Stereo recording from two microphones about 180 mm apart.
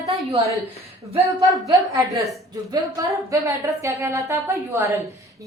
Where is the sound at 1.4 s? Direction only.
20° right (ahead or behind).